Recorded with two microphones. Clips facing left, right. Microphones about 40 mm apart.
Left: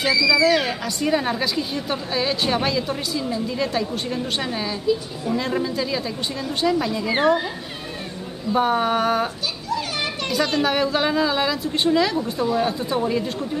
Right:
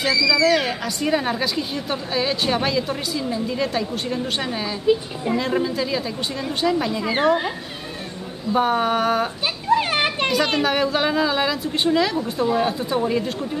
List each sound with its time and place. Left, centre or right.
0.0 s speech: centre
4.8 s a woman's voice: right
5.4 s a woman's voice: centre
8.5 s speech: centre
9.4 s children playing: right
10.3 s a woman's voice: centre